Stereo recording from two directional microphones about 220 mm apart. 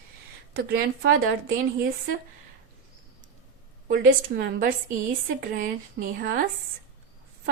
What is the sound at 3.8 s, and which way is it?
A woman's voice, 40° right (ahead or behind).